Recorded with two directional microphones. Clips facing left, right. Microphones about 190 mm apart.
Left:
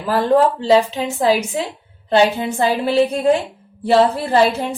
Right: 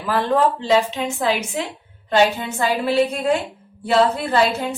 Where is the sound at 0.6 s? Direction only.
35° left (ahead or behind).